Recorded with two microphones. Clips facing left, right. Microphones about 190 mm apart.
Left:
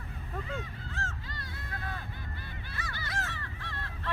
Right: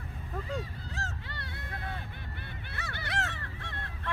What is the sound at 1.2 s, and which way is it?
Honk, 65° right (ahead or behind).